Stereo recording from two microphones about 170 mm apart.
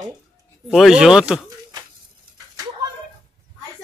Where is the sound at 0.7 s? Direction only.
Centre (ahead or behind).